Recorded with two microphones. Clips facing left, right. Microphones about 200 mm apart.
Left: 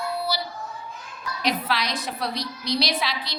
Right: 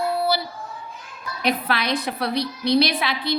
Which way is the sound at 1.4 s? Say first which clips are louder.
Right 3 dB; 55° right (ahead or behind).